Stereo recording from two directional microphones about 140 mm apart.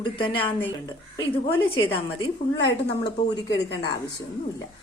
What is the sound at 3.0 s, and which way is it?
Speech, 30° left (ahead or behind).